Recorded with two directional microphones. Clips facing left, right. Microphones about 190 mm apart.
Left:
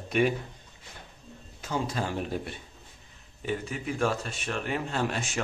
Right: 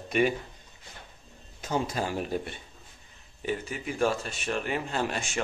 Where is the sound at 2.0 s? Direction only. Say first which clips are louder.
Right 1 dB; 5° right (ahead or behind).